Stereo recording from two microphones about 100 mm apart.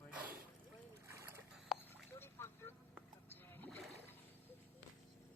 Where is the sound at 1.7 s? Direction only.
5° right (ahead or behind).